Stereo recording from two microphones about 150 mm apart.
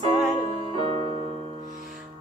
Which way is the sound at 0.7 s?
40° right (ahead or behind).